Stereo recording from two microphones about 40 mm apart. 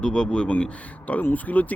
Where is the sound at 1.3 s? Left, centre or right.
Left.